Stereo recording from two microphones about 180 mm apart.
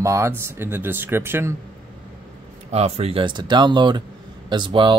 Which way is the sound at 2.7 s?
35° right (ahead or behind).